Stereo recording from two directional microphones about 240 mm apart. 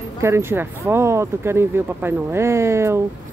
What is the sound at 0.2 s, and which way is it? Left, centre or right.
Speech, centre.